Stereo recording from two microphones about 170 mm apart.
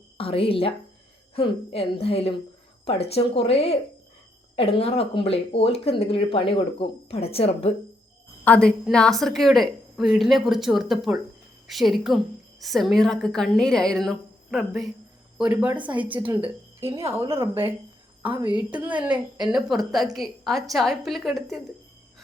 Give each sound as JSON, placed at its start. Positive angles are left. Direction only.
{"t": 0.2, "sound": "a woman's voice", "side_deg": 35}
{"t": 8.4, "sound": "a woman's voice", "side_deg": 5}